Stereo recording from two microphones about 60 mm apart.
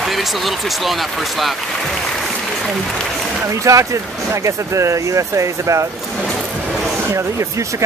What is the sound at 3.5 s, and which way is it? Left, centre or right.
Speech, right.